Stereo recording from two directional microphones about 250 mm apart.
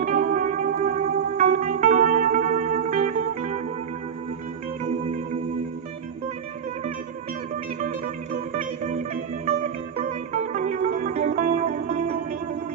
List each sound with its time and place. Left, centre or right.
0.0 s music: right
7.8 s music: right